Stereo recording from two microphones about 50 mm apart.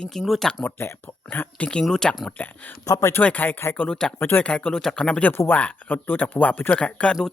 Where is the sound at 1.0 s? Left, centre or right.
Left.